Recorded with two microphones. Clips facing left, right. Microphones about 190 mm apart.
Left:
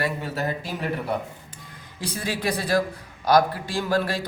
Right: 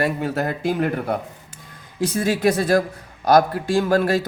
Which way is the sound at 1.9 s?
50° right (ahead or behind).